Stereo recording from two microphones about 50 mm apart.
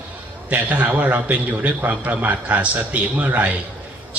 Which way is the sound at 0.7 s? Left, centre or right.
Right.